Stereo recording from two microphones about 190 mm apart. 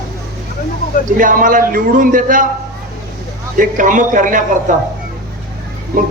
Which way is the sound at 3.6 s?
45° right (ahead or behind).